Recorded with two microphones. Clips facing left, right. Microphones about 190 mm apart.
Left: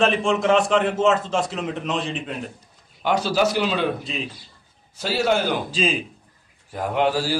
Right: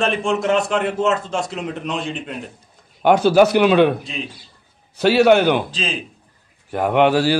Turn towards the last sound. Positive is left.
turn(degrees=-70)  # may be behind; listen again after turning